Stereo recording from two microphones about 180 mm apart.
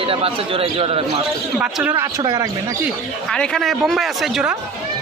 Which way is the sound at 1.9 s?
20° right (ahead or behind).